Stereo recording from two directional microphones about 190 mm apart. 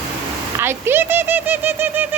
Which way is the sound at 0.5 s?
10° right (ahead or behind).